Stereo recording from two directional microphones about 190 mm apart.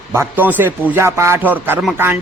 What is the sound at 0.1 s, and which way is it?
A man's voice, 10° right (ahead or behind).